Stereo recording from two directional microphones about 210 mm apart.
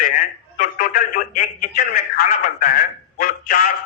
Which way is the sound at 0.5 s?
40° left (ahead or behind).